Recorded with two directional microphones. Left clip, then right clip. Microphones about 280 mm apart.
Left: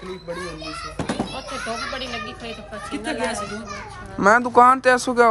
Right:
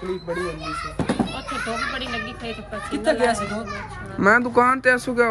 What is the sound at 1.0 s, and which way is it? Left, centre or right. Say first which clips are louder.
Children playing: right 1 dB; centre.